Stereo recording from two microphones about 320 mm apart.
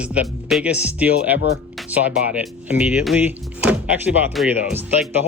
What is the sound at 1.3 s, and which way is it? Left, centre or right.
Speech, left.